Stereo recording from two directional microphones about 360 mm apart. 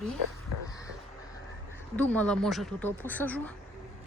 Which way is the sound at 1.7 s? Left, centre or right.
Centre.